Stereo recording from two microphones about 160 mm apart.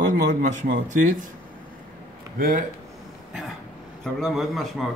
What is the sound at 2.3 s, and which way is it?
Speech, 60° right (ahead or behind).